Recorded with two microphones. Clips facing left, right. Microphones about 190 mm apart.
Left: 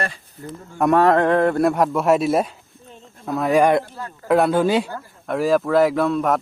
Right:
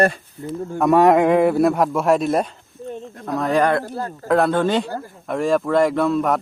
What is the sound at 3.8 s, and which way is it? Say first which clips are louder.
Speech: right 7 dB; 40° right (ahead or behind).